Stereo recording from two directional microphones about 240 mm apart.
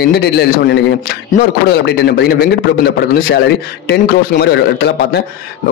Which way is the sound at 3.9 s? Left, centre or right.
Left.